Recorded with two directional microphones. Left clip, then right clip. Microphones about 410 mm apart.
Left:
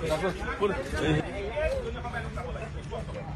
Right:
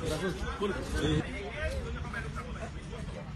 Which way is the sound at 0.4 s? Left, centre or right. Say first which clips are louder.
Left 6 dB; centre.